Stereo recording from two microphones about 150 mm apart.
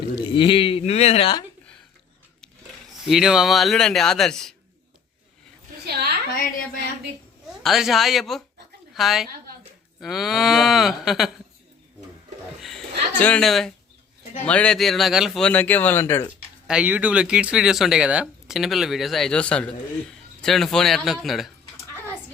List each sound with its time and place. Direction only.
0.2 s speech: 35° left (ahead or behind)
3.1 s speech: 5° right (ahead or behind)
5.8 s a sound: 90° right
7.6 s a woman's voice: centre (ahead or behind)
12.6 s speech: 5° left (ahead or behind)
16.6 s speech: 10° right (ahead or behind)